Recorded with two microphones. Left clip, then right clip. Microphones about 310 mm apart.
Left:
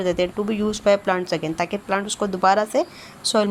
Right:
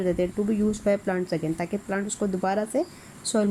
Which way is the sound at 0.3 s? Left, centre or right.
Left.